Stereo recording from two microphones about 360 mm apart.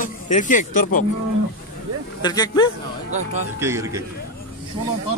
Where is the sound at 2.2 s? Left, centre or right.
Centre.